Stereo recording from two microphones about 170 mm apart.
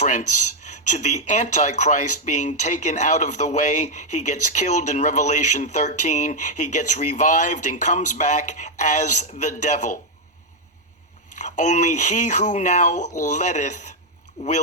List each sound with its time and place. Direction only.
0.0 s speech: 45° left (ahead or behind)
11.3 s speech: 45° left (ahead or behind)